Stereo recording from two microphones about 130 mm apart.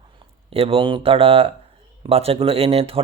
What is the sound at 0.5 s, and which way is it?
A man's voice, 45° right (ahead or behind).